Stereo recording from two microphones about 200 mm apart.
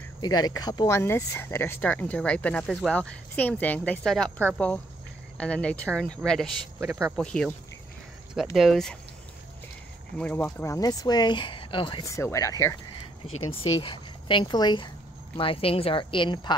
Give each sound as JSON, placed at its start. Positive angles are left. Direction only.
{"t": 0.2, "sound": "speech", "side_deg": 20}
{"t": 8.5, "sound": "speech", "side_deg": 0}
{"t": 10.1, "sound": "speech", "side_deg": 10}
{"t": 13.5, "sound": "a woman's voice", "side_deg": 30}